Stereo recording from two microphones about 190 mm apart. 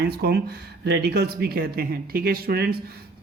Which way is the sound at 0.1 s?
55° right (ahead or behind).